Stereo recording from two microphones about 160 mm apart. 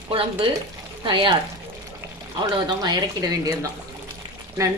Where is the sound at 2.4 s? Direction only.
25° right (ahead or behind).